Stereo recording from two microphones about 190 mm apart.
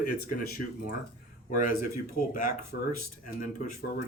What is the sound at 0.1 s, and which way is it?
A man's voice, 50° left (ahead or behind).